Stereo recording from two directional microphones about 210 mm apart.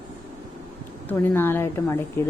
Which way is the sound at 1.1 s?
10° left (ahead or behind).